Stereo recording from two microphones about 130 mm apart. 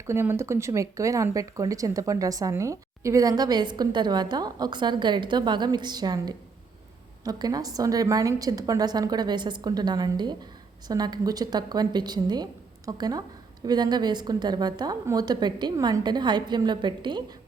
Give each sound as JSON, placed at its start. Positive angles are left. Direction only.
{"t": 0.1, "sound": "a woman's voice", "side_deg": -20}